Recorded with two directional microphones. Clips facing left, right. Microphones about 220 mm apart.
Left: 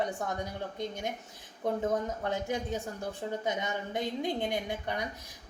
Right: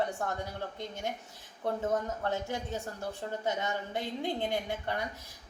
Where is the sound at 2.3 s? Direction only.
15° left (ahead or behind).